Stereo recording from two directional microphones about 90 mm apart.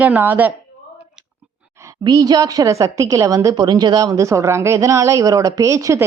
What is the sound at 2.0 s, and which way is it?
A woman's voice, 45° right (ahead or behind).